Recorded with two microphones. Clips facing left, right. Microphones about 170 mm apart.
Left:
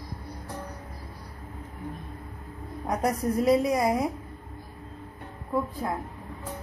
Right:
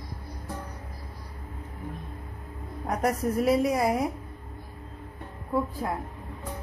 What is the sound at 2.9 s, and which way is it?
A woman's voice, 5° right (ahead or behind).